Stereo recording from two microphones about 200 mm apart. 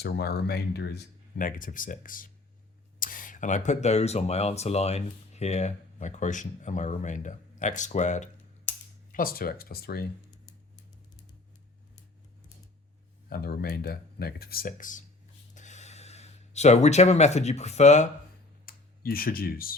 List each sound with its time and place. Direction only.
0.0 s speech: 50° left (ahead or behind)
9.1 s speech: 45° left (ahead or behind)
13.3 s speech: 50° left (ahead or behind)
15.5 s gasp: 35° left (ahead or behind)
18.6 s speech: 45° left (ahead or behind)